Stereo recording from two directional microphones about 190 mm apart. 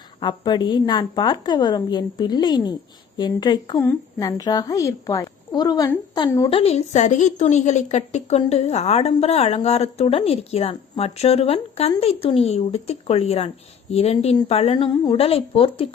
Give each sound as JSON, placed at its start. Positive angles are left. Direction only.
{"t": 0.2, "sound": "a woman's voice", "side_deg": 25}
{"t": 6.6, "sound": "a woman's voice", "side_deg": 35}